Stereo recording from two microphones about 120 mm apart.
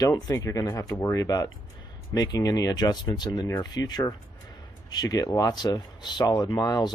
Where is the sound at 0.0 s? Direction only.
30° left (ahead or behind).